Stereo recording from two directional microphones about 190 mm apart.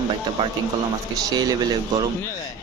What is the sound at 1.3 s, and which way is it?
Speech, 20° right (ahead or behind).